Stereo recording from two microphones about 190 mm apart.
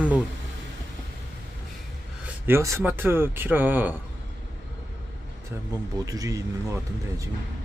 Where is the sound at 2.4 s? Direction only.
15° right (ahead or behind).